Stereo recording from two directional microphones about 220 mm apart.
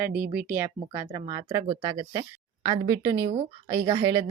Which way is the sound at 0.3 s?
10° right (ahead or behind).